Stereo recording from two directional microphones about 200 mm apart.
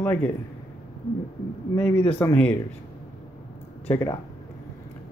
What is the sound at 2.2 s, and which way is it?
Speech, 10° left (ahead or behind).